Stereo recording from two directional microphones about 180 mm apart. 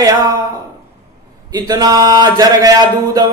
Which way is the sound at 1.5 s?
20° right (ahead or behind).